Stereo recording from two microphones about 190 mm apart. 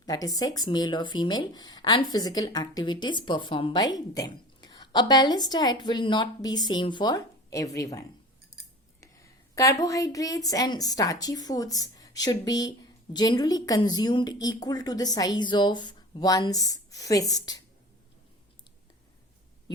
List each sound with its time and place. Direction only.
0.0 s speech: 20° left (ahead or behind)
9.8 s speech: 20° left (ahead or behind)